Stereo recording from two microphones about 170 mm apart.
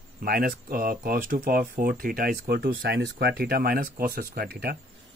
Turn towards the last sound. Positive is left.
turn(degrees=-65)  # may be behind; listen again after turning